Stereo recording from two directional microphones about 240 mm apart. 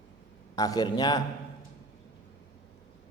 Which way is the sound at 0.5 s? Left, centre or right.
Centre.